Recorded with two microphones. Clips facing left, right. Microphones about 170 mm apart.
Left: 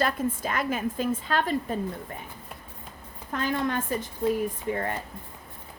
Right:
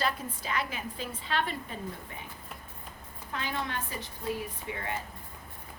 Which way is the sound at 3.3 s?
50° left (ahead or behind).